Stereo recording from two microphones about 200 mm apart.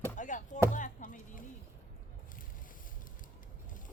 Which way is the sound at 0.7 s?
40° left (ahead or behind).